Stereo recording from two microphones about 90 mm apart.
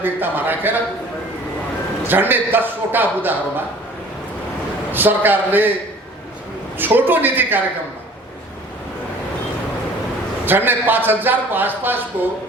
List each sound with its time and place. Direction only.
0.0 s a man's voice: 20° right (ahead or behind)
2.0 s a man's voice: 20° right (ahead or behind)
4.9 s a man's voice: 20° right (ahead or behind)
6.7 s a man's voice: 20° right (ahead or behind)
10.4 s a man's voice: 20° right (ahead or behind)